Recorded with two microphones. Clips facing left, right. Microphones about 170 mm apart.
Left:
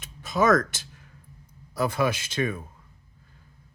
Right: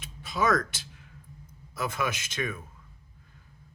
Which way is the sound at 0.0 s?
45° left (ahead or behind).